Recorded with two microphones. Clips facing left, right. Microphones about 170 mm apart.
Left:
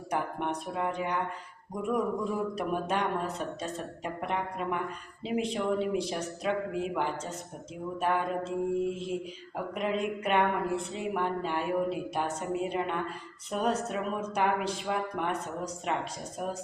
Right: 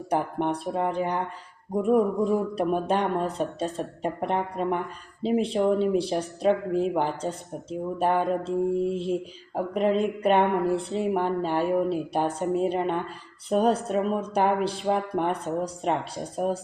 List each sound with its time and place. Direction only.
0.1 s speech: 35° right (ahead or behind)